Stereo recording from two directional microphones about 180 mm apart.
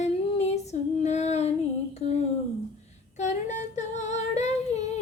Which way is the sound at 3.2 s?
40° left (ahead or behind).